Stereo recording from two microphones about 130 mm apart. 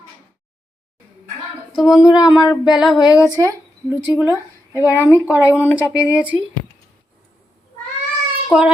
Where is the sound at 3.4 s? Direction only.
15° right (ahead or behind).